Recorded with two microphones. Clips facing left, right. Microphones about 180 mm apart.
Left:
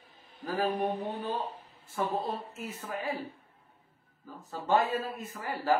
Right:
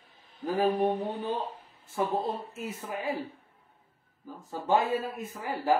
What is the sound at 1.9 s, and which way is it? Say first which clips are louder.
A man's voice: right 2 dB; 10° right (ahead or behind).